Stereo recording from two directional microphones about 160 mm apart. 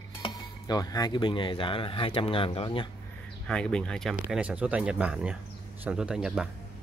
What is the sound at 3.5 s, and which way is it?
Speech, 5° left (ahead or behind).